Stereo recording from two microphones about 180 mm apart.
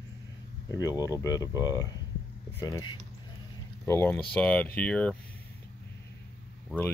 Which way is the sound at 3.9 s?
10° left (ahead or behind).